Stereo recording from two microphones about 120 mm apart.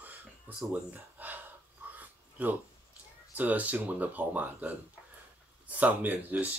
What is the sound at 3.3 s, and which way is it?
Speech, 15° right (ahead or behind).